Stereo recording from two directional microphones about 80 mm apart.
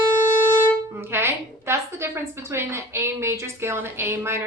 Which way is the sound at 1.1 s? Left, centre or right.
Right.